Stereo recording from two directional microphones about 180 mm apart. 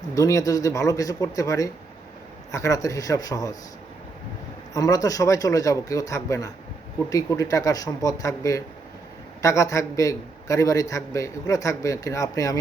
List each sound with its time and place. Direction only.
0.1 s speech: 20° left (ahead or behind)
4.7 s a man's voice: 20° left (ahead or behind)